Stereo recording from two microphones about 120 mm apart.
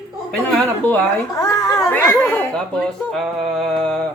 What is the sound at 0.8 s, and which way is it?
Speech, 20° left (ahead or behind).